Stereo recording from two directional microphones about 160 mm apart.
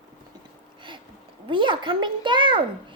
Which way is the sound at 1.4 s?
30° right (ahead or behind).